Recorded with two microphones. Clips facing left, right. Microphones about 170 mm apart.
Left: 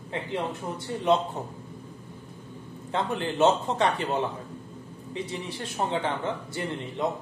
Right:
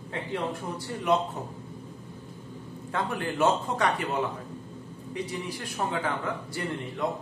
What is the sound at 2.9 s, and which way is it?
Speech, 25° left (ahead or behind).